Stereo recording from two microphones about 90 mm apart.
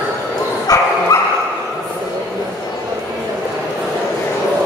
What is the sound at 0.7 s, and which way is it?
Dog, 40° left (ahead or behind).